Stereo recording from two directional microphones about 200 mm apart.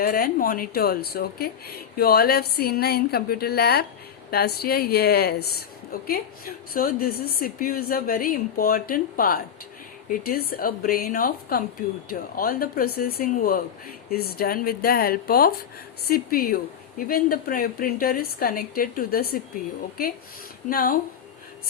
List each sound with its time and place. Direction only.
0.0 s speech: 45° left (ahead or behind)
20.7 s speech: 45° left (ahead or behind)